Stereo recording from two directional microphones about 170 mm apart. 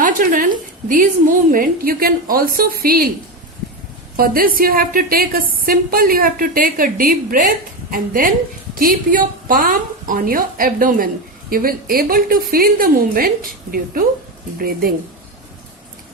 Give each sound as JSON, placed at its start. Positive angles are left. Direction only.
{"t": 0.0, "sound": "a woman's voice", "side_deg": -55}
{"t": 4.2, "sound": "a woman's voice", "side_deg": -55}